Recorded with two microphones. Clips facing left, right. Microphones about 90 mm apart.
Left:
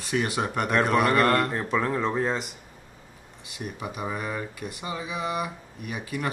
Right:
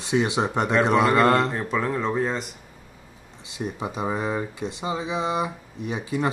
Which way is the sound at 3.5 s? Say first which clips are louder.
Right 5 dB; 25° right (ahead or behind).